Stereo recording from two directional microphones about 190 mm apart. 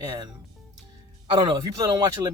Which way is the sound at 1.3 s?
25° right (ahead or behind).